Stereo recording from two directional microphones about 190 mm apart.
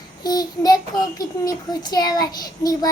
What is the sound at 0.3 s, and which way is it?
A child's voice, 20° left (ahead or behind).